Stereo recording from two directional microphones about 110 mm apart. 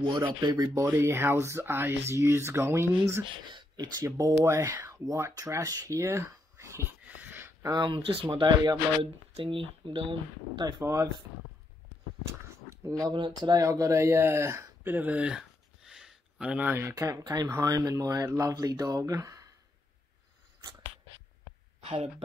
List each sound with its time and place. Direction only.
0.4 s speech: 35° right (ahead or behind)
0.8 s speech: 25° right (ahead or behind)
3.4 s a sound: 45° right (ahead or behind)
4.0 s speech: 30° right (ahead or behind)
4.7 s a sound: 25° right (ahead or behind)
7.6 s speech: 40° right (ahead or behind)
10.6 s speech: 30° right (ahead or behind)
12.3 s a sound: 25° right (ahead or behind)
13.1 s speech: 45° right (ahead or behind)
13.7 s speech: 30° right (ahead or behind)
17.2 s speech: 40° right (ahead or behind)